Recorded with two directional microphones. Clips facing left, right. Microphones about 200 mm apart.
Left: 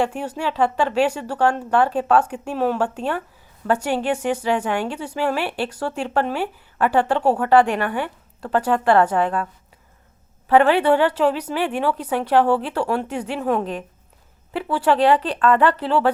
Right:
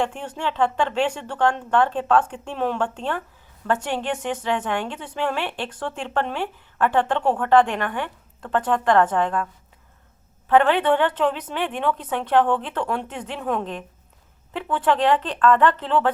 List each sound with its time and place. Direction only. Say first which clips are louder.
0.0 s a woman's voice: left 3 dB; 10° left (ahead or behind)
10.5 s a woman's voice: left 2 dB; 10° left (ahead or behind)